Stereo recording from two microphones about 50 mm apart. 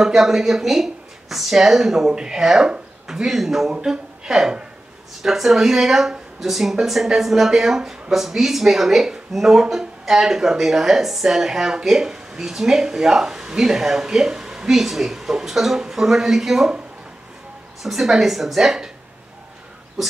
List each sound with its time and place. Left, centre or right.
0.0 s a woman's voice: centre
17.8 s speech: centre